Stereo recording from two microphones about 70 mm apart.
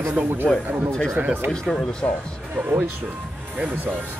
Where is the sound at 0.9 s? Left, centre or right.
Centre.